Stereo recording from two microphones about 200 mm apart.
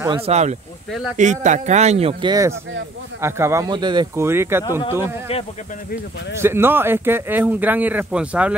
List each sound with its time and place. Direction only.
0.1 s speech: 30° right (ahead or behind)
3.2 s speech: 15° right (ahead or behind)
6.4 s speech: 10° right (ahead or behind)